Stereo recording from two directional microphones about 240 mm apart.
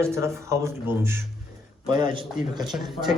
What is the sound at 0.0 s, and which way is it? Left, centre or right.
A man's voice, centre.